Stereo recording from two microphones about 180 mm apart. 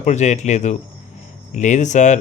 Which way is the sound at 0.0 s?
40° left (ahead or behind).